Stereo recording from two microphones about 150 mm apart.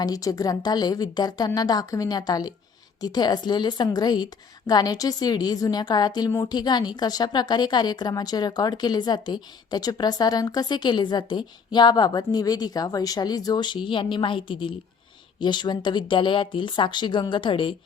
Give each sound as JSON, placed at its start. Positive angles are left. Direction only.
{"t": 0.0, "sound": "a woman's voice", "side_deg": 25}